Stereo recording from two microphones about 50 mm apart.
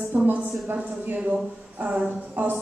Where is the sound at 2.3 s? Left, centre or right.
Right.